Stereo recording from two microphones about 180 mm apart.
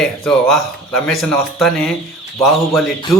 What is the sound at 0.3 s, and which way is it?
A man's voice, centre (ahead or behind).